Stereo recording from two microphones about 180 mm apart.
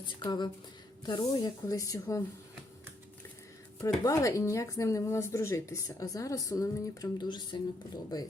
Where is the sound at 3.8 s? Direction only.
15° left (ahead or behind).